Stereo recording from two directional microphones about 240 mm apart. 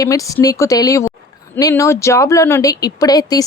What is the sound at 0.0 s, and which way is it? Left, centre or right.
Speech, centre.